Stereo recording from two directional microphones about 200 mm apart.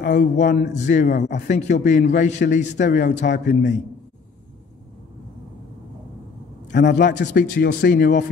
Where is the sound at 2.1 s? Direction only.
35° left (ahead or behind).